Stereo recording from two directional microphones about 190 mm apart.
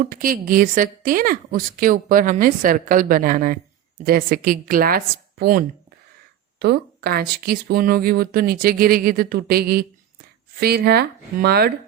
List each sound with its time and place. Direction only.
0.0 s a woman's voice: 45° right (ahead or behind)